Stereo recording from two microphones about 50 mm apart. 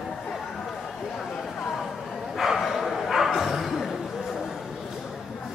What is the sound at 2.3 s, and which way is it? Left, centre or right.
Bow-wow, centre.